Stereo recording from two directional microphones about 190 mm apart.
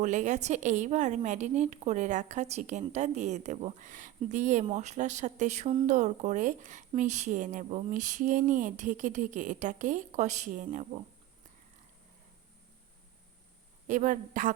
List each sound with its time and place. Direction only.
0.0 s a woman's voice: 40° right (ahead or behind)
13.8 s speech: 40° right (ahead or behind)